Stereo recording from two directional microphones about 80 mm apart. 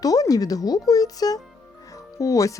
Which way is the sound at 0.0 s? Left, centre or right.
Left.